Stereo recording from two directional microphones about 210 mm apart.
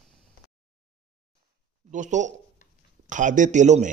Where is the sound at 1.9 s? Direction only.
35° right (ahead or behind).